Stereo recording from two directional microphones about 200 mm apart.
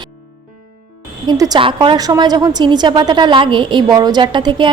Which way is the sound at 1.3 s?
20° right (ahead or behind).